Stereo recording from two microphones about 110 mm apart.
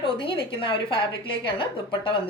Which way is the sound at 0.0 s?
50° left (ahead or behind).